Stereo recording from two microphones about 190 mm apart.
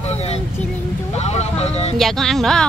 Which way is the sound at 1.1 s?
35° left (ahead or behind).